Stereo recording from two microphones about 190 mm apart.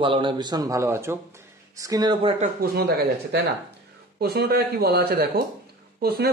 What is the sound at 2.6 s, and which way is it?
Speech, 55° right (ahead or behind).